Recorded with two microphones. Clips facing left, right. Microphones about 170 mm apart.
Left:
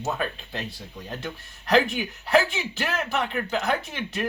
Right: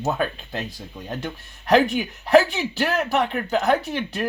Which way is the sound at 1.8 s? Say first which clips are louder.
Right 5 dB; 40° right (ahead or behind).